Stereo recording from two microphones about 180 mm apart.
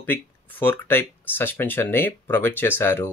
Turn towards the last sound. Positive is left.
turn(degrees=10)  # may be behind; listen again after turning